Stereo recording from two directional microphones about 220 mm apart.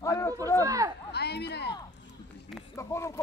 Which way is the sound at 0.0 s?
15° left (ahead or behind).